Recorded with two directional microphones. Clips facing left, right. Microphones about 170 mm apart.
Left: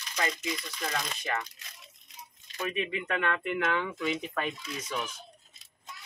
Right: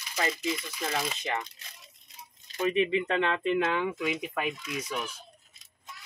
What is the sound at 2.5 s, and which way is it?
Speech, 20° right (ahead or behind).